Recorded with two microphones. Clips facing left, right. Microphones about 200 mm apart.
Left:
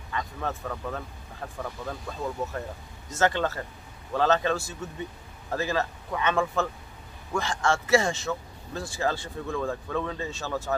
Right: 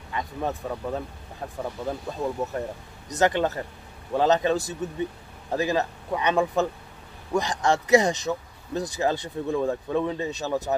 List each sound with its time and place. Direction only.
0.1 s speech: 15° right (ahead or behind)